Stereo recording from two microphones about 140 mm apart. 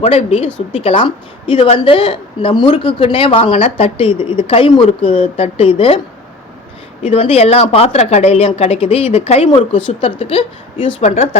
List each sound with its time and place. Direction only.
0.0 s a woman's voice: 50° left (ahead or behind)
7.0 s a woman's voice: 45° left (ahead or behind)
11.0 s a woman's voice: 50° left (ahead or behind)